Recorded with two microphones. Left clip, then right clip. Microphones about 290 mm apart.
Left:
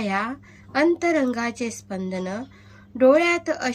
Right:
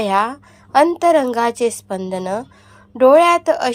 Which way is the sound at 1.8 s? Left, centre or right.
Right.